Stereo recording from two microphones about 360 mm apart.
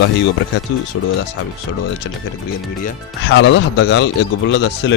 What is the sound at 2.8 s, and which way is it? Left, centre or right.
Speech, left.